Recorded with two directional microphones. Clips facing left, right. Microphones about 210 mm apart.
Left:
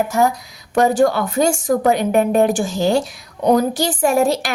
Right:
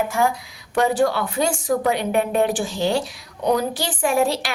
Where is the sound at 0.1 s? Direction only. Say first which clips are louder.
Left 4 dB; 40° left (ahead or behind).